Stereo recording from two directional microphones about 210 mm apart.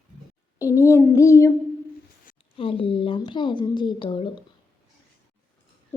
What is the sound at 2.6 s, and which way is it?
A woman's voice, 25° left (ahead or behind).